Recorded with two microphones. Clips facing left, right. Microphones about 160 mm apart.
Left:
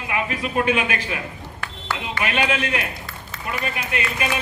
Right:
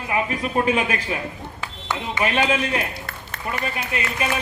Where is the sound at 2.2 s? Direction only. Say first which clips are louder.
Right 2 dB; 30° right (ahead or behind).